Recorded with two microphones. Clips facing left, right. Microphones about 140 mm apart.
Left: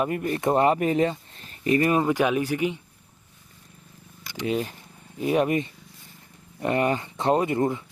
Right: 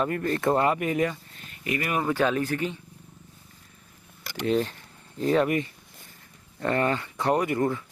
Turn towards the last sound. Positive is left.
turn(degrees=20)  # may be behind; listen again after turning